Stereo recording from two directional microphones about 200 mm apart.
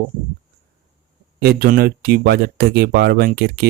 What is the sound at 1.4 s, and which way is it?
Speech, 50° right (ahead or behind).